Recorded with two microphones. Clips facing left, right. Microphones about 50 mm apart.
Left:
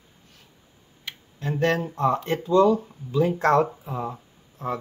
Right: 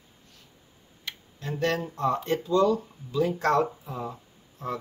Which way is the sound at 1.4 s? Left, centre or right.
Left.